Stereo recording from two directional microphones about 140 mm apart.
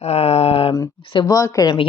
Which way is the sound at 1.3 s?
25° left (ahead or behind).